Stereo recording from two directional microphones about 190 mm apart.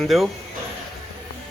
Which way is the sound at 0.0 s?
Centre (ahead or behind).